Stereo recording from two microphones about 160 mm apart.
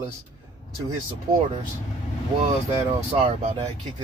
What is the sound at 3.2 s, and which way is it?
Speech, 40° right (ahead or behind).